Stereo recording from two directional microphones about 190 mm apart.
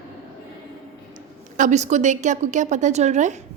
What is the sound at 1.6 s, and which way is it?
A woman's voice, 40° right (ahead or behind).